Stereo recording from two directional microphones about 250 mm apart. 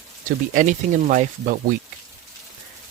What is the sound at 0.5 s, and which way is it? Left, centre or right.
Speech, right.